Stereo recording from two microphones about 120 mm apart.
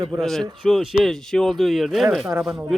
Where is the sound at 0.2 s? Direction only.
Centre (ahead or behind).